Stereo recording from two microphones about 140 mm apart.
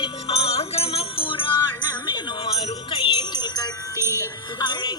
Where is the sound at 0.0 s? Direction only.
45° left (ahead or behind).